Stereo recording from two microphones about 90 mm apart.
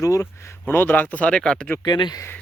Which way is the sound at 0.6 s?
25° left (ahead or behind).